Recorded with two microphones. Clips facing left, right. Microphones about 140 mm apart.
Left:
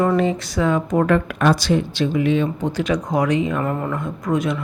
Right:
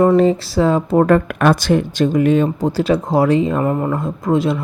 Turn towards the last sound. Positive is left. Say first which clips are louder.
# right 4 dB
turn(degrees=-30)  # may be behind; listen again after turning